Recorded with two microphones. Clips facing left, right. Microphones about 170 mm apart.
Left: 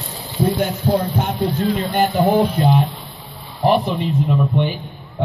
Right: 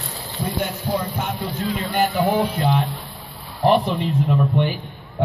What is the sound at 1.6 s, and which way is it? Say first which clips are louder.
Speech: left 5 dB; 35° left (ahead or behind).